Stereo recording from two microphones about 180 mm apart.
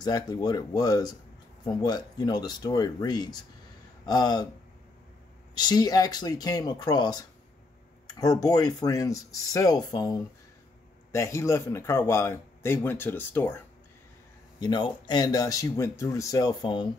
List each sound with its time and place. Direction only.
0.0 s speech: 20° left (ahead or behind)
5.5 s speech: 25° left (ahead or behind)
14.6 s speech: 25° left (ahead or behind)